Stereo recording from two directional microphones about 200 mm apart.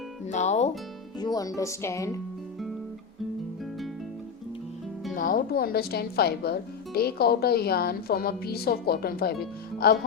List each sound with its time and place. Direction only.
0.3 s music: 35° left (ahead or behind)
1.2 s speech: 20° left (ahead or behind)
5.1 s speech: 45° left (ahead or behind)